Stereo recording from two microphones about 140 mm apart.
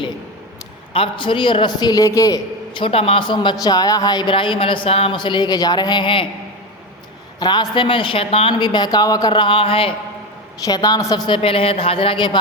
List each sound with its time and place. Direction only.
0.9 s speech: 40° left (ahead or behind)
2.7 s speech: 40° left (ahead or behind)
7.3 s speech: 30° left (ahead or behind)
10.6 s a woman's voice: 30° left (ahead or behind)
11.4 s speech: 40° left (ahead or behind)